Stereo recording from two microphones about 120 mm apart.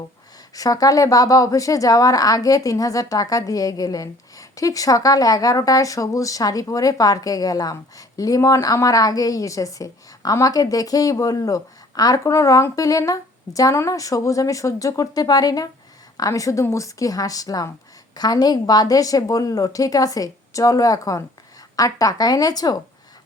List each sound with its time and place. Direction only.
0.5 s a woman's voice: 30° left (ahead or behind)